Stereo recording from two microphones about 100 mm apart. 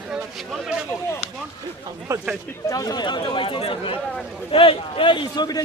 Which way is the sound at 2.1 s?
30° right (ahead or behind).